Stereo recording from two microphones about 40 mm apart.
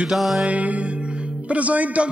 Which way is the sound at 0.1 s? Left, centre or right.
Centre.